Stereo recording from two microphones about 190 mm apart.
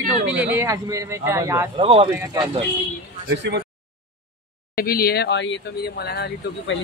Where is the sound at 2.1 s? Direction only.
15° right (ahead or behind).